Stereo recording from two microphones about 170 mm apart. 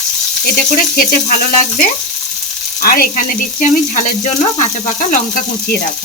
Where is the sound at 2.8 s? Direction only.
60° left (ahead or behind).